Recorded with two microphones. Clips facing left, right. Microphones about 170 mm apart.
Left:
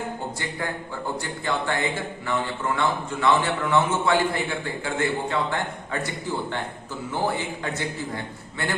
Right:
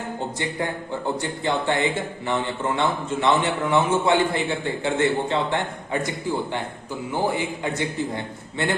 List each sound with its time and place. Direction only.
1.2 s a man's voice: 20° right (ahead or behind)